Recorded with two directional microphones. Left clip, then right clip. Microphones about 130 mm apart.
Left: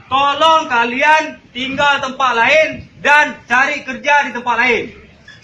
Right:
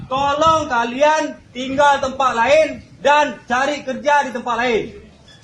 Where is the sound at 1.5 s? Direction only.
90° right.